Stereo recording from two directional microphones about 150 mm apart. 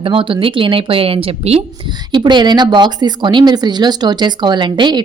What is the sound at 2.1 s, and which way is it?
A woman's voice, 30° right (ahead or behind).